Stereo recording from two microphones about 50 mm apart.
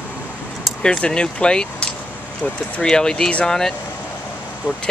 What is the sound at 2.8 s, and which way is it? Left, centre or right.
Speech, centre.